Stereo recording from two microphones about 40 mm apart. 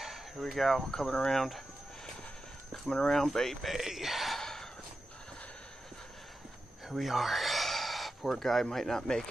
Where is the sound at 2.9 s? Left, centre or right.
Centre.